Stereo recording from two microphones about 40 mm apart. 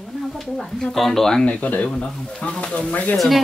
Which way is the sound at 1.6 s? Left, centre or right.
Left.